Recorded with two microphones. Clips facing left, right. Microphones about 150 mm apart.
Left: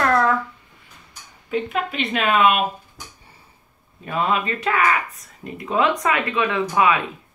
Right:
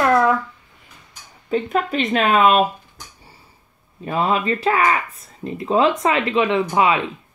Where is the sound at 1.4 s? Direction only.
35° right (ahead or behind).